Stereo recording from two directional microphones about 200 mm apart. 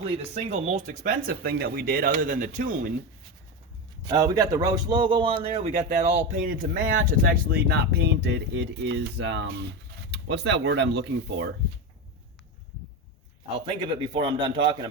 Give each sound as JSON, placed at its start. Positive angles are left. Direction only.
{"t": 0.0, "sound": "a man's voice", "side_deg": -30}
{"t": 4.0, "sound": "a man's voice", "side_deg": -20}
{"t": 13.7, "sound": "a man's voice", "side_deg": -25}